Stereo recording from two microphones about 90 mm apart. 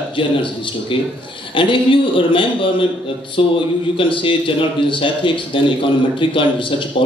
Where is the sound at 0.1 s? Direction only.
70° left (ahead or behind).